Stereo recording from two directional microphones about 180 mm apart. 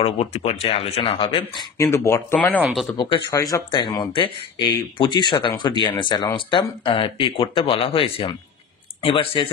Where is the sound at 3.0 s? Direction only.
25° left (ahead or behind).